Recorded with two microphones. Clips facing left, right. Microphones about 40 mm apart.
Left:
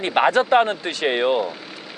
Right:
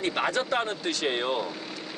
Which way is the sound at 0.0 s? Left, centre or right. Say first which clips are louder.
Left 9 dB; left.